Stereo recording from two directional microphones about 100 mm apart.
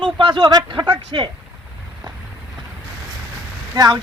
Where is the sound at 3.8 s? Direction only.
40° right (ahead or behind).